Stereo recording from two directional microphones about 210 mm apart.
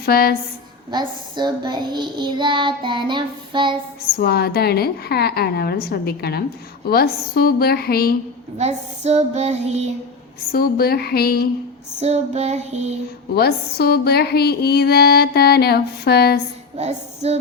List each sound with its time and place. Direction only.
0.0 s speech: 45° left (ahead or behind)
0.9 s child singing: 20° right (ahead or behind)
4.0 s speech: 50° left (ahead or behind)
8.5 s child singing: 30° right (ahead or behind)
10.5 s speech: 45° left (ahead or behind)
11.9 s child singing: 30° right (ahead or behind)
13.3 s speech: 50° left (ahead or behind)
16.7 s music: 30° right (ahead or behind)